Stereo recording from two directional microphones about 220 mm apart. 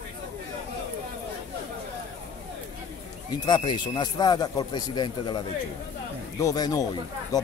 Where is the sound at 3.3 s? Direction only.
20° left (ahead or behind).